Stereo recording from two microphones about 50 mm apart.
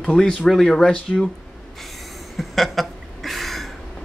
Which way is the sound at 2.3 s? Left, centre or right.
Centre.